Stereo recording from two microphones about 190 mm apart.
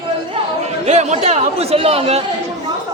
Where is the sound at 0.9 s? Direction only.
35° right (ahead or behind).